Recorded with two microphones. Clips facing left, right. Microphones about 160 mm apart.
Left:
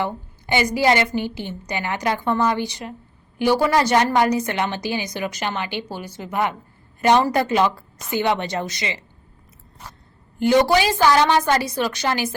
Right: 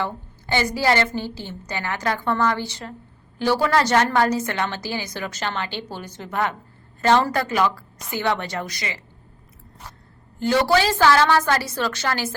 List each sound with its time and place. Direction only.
0.0 s a woman's voice: 15° left (ahead or behind)
10.4 s a woman's voice: 20° left (ahead or behind)